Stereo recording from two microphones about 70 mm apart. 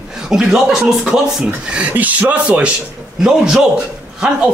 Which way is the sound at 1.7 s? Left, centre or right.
Centre.